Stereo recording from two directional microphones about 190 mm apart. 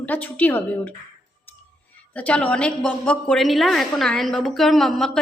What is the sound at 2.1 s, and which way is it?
A woman's voice, 5° left (ahead or behind).